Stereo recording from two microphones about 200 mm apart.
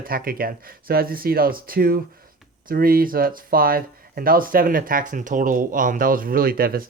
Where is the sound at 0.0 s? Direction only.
45° right (ahead or behind).